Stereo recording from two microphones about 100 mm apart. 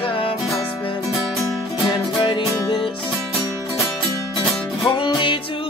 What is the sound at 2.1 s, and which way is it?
Music, 50° left (ahead or behind).